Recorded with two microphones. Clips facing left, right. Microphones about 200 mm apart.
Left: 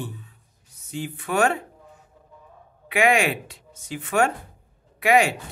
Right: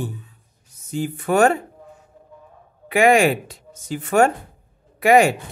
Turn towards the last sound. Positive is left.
turn(degrees=-45)  # may be behind; listen again after turning